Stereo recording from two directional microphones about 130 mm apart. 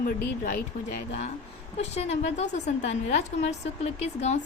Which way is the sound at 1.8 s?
55° left (ahead or behind).